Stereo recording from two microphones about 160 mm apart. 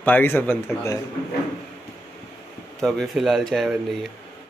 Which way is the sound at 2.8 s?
Centre (ahead or behind).